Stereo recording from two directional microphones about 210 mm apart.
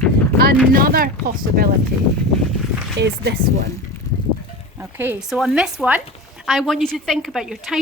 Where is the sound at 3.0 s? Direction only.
55° right (ahead or behind).